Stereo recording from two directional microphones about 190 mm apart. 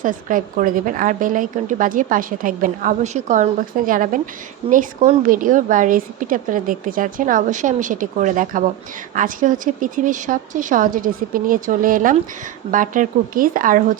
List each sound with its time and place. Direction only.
0.0 s a woman's voice: 45° right (ahead or behind)